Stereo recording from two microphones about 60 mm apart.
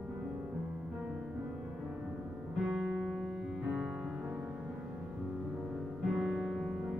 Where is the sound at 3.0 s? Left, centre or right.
Centre.